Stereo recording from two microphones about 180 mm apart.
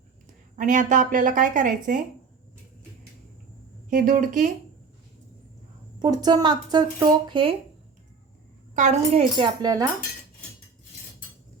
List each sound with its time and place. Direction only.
0.5 s speech: 45° right (ahead or behind)
3.8 s speech: 45° right (ahead or behind)
6.0 s speech: 20° right (ahead or behind)
8.7 s speech: 40° right (ahead or behind)
9.4 s speech: 20° right (ahead or behind)